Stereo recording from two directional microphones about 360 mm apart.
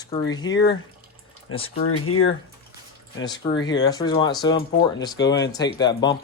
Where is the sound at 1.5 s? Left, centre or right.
Centre.